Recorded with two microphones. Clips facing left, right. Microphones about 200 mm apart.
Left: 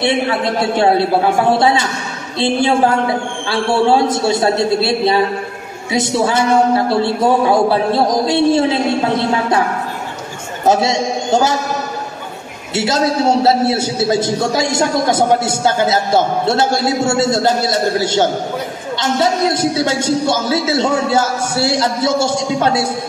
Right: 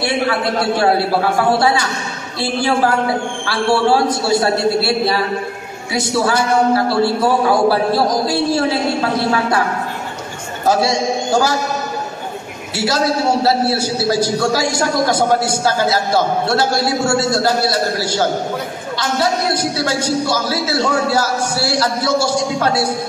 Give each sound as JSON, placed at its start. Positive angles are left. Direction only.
{"t": 0.0, "sound": "a man's voice", "side_deg": 20}
{"t": 10.7, "sound": "a man's voice", "side_deg": 25}
{"t": 12.7, "sound": "a man's voice", "side_deg": 20}